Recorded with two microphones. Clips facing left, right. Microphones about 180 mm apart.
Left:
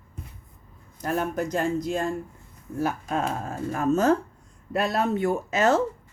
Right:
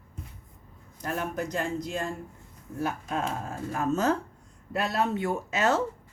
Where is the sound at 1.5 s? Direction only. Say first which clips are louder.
Left 7 dB; 45° left (ahead or behind).